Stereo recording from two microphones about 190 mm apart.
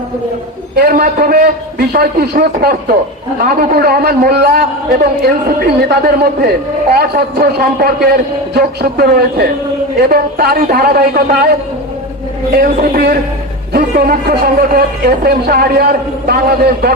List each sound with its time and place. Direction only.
0.8 s a man's voice: 55° right (ahead or behind)
12.5 s a man's voice: 55° right (ahead or behind)